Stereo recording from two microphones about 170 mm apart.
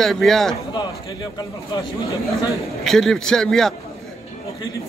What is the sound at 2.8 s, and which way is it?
Speech, centre (ahead or behind).